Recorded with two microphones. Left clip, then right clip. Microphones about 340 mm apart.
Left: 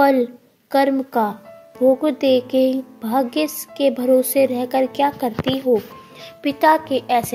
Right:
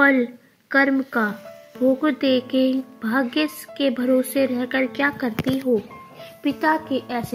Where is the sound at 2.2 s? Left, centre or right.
Left.